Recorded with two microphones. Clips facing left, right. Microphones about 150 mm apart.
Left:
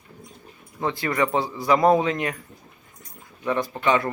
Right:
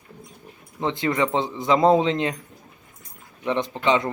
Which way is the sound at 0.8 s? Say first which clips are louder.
Right 1 dB; 20° right (ahead or behind).